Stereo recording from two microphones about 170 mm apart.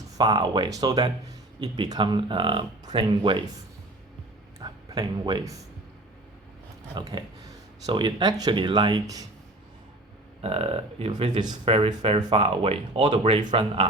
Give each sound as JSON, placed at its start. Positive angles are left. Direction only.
{"t": 0.2, "sound": "speech", "side_deg": -25}
{"t": 4.6, "sound": "speech", "side_deg": -25}
{"t": 6.9, "sound": "speech", "side_deg": -25}
{"t": 10.4, "sound": "speech", "side_deg": -35}